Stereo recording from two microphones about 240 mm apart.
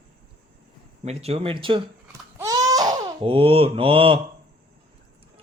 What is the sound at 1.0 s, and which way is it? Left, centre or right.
Mantra, right.